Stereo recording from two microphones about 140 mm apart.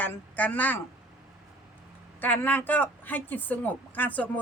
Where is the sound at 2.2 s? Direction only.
15° left (ahead or behind).